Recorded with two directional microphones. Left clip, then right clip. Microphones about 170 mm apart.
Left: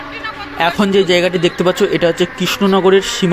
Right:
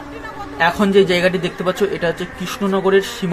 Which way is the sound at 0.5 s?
45° left (ahead or behind).